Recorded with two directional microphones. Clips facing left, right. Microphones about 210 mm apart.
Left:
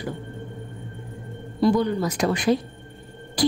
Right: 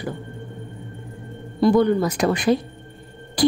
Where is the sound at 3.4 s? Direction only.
55° right (ahead or behind).